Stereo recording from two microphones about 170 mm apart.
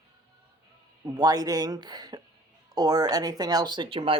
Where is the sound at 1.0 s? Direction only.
20° right (ahead or behind).